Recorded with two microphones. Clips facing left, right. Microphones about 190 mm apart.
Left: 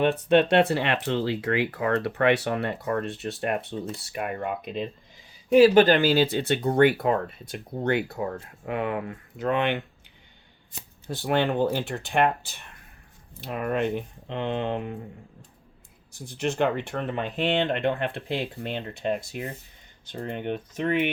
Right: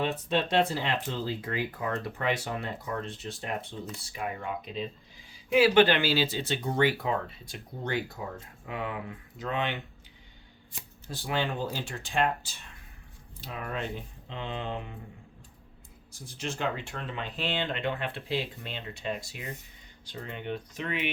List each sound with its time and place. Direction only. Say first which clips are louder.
0.0 s speech: left 9 dB; 65° left (ahead or behind)
5.5 s speech: left 6 dB; 40° left (ahead or behind); by 9.8 s 55° left (ahead or behind)
11.1 s speech: left 7 dB; 65° left (ahead or behind)
16.4 s speech: left 8 dB; 60° left (ahead or behind)